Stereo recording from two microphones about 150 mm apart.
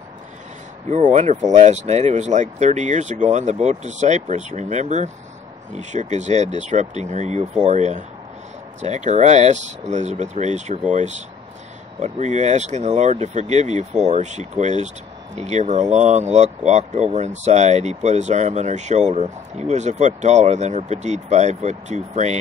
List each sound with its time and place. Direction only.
0.8 s speech: 50° right (ahead or behind)